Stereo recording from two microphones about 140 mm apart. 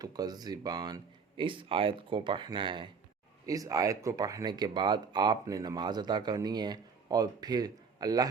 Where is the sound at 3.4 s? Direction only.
25° right (ahead or behind).